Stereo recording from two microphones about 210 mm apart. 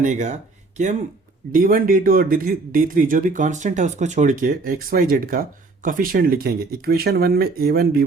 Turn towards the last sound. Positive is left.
turn(degrees=-45)  # may be behind; listen again after turning